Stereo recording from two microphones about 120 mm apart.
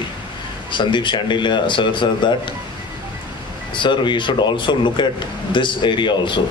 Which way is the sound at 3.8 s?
40° left (ahead or behind).